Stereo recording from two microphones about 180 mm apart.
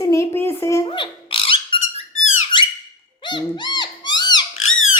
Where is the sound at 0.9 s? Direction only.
30° left (ahead or behind).